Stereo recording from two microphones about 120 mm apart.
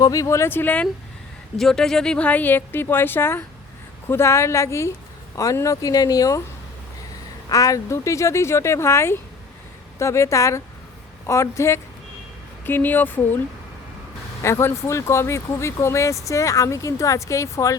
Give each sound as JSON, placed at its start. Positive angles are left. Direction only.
{"t": 0.0, "sound": "speech", "side_deg": 30}
{"t": 1.5, "sound": "speech", "side_deg": 5}
{"t": 7.5, "sound": "speech", "side_deg": 30}
{"t": 14.4, "sound": "speech", "side_deg": 20}